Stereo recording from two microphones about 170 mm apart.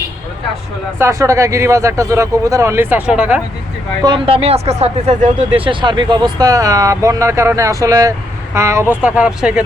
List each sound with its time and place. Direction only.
0.9 s speech: 15° right (ahead or behind)
4.0 s speech: 30° right (ahead or behind); by 9.6 s 5° right (ahead or behind)